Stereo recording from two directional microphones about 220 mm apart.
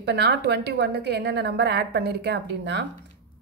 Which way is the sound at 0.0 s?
50° right (ahead or behind).